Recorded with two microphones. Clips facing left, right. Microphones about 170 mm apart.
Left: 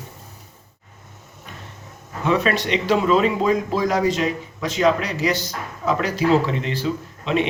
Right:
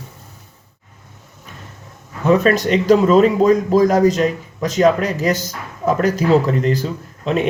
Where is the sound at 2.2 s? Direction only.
45° right (ahead or behind).